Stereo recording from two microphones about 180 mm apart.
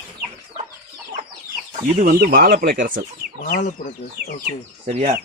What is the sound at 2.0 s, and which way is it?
Speech, 50° right (ahead or behind).